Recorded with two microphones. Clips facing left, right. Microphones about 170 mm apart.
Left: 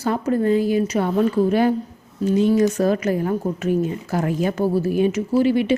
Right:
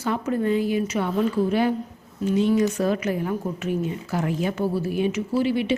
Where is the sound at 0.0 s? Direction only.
40° left (ahead or behind).